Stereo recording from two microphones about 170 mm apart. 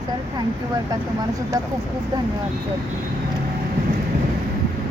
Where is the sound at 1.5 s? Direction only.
20° right (ahead or behind).